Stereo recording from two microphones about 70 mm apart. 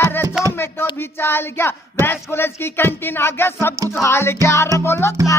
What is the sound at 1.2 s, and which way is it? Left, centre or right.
Speech, left.